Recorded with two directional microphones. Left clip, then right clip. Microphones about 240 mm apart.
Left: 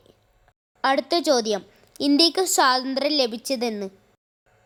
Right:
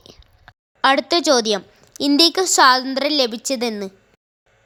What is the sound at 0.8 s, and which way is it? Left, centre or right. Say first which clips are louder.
A woman's voice: right 5 dB; centre.